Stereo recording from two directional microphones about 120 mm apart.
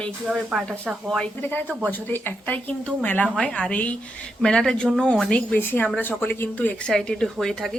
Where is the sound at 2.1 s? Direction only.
15° left (ahead or behind).